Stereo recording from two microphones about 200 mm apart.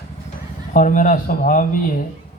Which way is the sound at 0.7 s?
40° left (ahead or behind).